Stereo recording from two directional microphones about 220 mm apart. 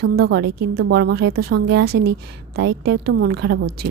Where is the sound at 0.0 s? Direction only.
45° right (ahead or behind).